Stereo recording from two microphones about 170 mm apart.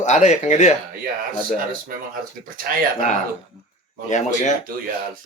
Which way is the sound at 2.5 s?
55° right (ahead or behind).